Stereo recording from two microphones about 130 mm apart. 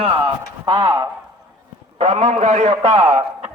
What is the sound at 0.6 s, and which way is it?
Speech, 35° right (ahead or behind).